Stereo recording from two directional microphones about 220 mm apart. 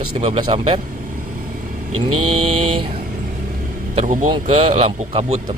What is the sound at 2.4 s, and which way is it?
Speech, 25° right (ahead or behind).